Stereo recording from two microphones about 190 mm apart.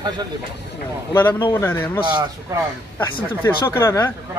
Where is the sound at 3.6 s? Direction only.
15° left (ahead or behind).